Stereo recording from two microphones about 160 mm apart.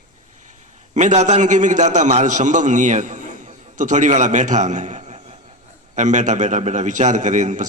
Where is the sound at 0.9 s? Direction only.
50° right (ahead or behind).